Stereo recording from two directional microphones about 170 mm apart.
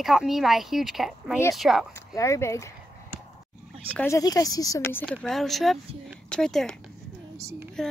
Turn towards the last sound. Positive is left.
turn(degrees=5)  # may be behind; listen again after turning